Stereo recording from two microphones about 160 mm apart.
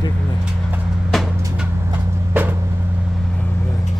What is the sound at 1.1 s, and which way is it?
Music, centre (ahead or behind).